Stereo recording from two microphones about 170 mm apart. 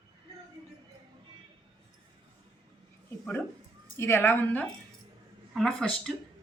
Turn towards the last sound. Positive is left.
turn(degrees=5)  # may be behind; listen again after turning